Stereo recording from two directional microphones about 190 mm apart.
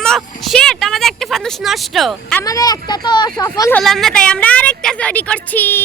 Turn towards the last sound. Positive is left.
turn(degrees=10)  # may be behind; listen again after turning